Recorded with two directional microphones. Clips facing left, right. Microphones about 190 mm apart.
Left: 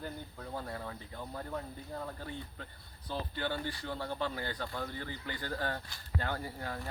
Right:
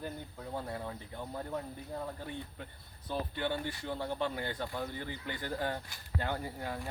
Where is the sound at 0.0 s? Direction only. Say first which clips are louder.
Right 1 dB; 15° right (ahead or behind).